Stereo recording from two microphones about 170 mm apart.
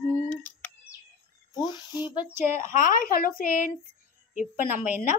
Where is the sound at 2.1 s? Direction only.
10° right (ahead or behind).